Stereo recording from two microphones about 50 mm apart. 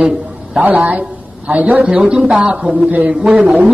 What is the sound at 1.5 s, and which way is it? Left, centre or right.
Speech, right.